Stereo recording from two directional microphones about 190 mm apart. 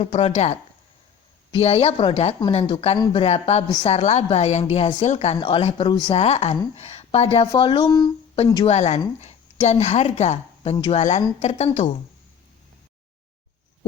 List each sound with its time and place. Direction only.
0.0 s speech: 30° left (ahead or behind)
8.6 s speech: 35° left (ahead or behind)